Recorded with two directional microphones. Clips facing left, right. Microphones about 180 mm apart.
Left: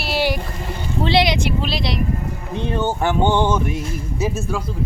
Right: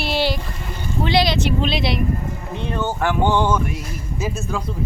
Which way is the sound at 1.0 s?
25° left (ahead or behind).